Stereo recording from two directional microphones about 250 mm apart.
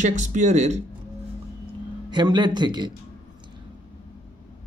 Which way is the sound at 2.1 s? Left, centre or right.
Centre.